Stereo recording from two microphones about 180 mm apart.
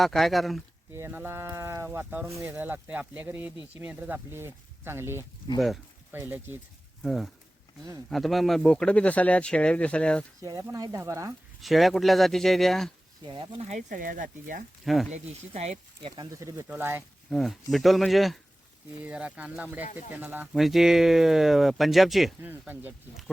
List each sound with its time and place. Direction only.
0.0 s speech: centre (ahead or behind)
0.9 s speech: 15° right (ahead or behind)
5.5 s speech: centre (ahead or behind)
6.1 s speech: 10° right (ahead or behind)
7.0 s speech: centre (ahead or behind)
10.4 s speech: 20° right (ahead or behind)
11.6 s speech: centre (ahead or behind)
13.2 s speech: 30° right (ahead or behind); by 14.6 s 50° right (ahead or behind)
15.1 s speech: 35° right (ahead or behind); by 17.0 s 10° right (ahead or behind)
17.2 s speech: centre (ahead or behind)
19.8 s speech: 40° left (ahead or behind)
20.1 s speech: 10° right (ahead or behind)